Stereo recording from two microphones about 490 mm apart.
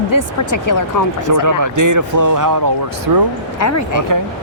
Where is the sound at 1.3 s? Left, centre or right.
Right.